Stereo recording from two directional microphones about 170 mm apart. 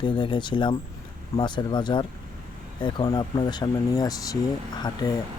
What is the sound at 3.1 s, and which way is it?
Speech, 25° left (ahead or behind).